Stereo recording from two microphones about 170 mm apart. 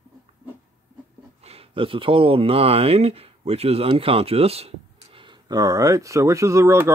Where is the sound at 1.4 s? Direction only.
35° right (ahead or behind).